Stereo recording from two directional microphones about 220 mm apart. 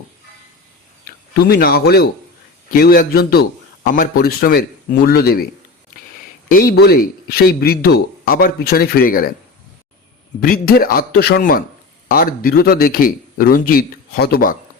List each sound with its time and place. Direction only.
1.0 s speech: 40° left (ahead or behind)
6.5 s speech: 40° left (ahead or behind)
10.4 s speech: 40° left (ahead or behind)